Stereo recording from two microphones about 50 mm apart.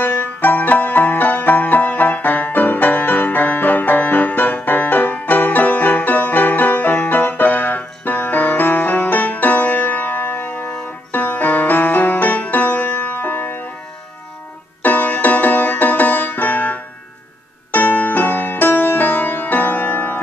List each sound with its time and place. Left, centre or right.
0.0 s music: left
14.8 s music: left